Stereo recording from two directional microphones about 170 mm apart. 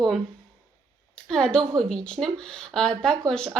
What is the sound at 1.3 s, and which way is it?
Speech, 5° left (ahead or behind).